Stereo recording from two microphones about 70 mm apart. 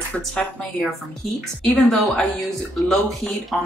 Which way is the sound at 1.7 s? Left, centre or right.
Centre.